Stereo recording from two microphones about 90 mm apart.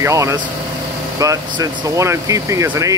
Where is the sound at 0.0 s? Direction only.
35° right (ahead or behind).